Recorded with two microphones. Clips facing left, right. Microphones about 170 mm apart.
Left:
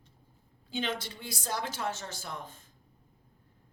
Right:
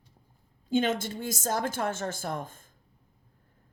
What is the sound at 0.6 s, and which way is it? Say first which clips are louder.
A man's voice: right 8 dB; 45° right (ahead or behind).